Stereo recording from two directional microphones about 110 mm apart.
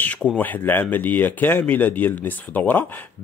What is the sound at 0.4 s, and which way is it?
Speech, 15° left (ahead or behind).